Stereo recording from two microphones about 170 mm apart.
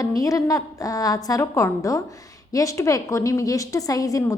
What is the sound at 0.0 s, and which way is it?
A woman's voice, 20° left (ahead or behind).